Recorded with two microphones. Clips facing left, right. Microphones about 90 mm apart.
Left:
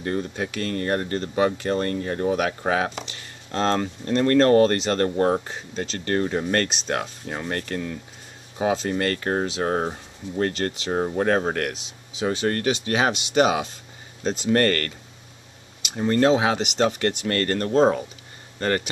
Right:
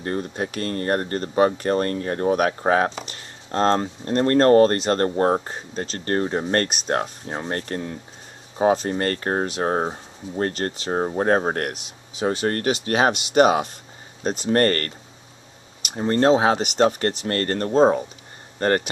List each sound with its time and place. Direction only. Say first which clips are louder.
0.0 s speech: right 1 dB; 40° right (ahead or behind)
18.6 s speech: right 3 dB; 40° right (ahead or behind)